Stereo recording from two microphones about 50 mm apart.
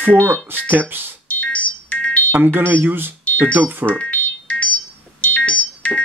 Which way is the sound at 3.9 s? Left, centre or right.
Left.